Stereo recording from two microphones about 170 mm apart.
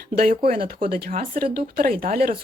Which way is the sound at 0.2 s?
55° right (ahead or behind).